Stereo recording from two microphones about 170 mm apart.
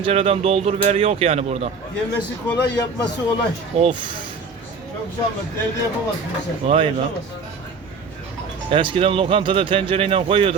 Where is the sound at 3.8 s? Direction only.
30° right (ahead or behind).